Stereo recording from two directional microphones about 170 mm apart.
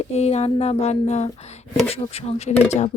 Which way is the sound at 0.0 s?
40° left (ahead or behind).